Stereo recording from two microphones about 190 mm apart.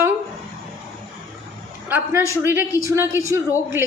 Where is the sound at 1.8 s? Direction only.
10° right (ahead or behind).